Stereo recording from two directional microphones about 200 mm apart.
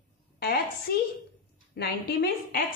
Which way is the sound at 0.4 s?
50° left (ahead or behind).